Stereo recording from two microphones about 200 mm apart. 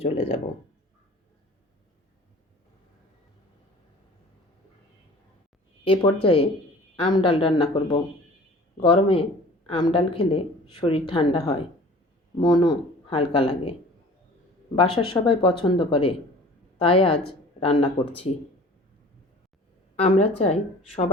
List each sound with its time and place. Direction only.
0.0 s speech: 30° left (ahead or behind)
5.8 s speech: 25° left (ahead or behind)
14.8 s a woman's voice: 30° left (ahead or behind)
20.0 s speech: 30° left (ahead or behind)